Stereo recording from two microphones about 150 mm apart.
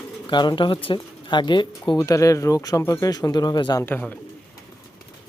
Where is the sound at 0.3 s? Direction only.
30° left (ahead or behind).